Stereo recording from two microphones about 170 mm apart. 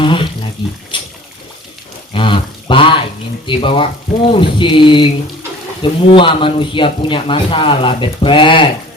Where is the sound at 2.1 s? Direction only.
30° left (ahead or behind).